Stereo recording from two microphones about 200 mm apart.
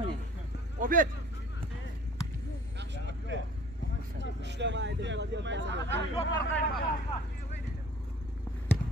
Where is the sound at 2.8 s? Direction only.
60° right (ahead or behind).